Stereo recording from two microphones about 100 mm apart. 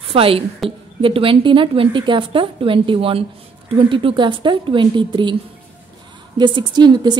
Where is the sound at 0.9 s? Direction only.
60° right (ahead or behind).